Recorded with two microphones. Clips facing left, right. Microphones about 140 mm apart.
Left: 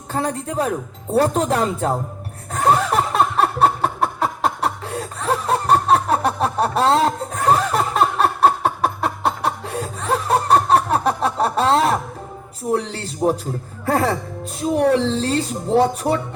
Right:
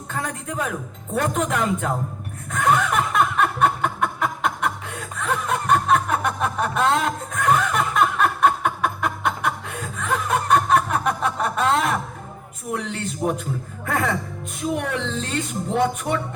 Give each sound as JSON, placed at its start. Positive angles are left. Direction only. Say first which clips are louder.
{"t": 0.1, "sound": "speech", "louder": "left 6 dB", "side_deg": 35}
{"t": 2.5, "sound": "a sound", "louder": "left 3 dB", "side_deg": 35}
{"t": 12.7, "sound": "speech", "louder": "left 4 dB", "side_deg": 35}